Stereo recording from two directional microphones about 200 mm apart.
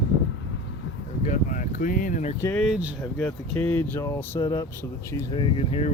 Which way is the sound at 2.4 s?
10° left (ahead or behind).